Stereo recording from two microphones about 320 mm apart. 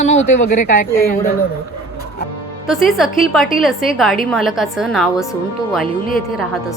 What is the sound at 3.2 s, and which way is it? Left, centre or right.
A woman's voice, centre.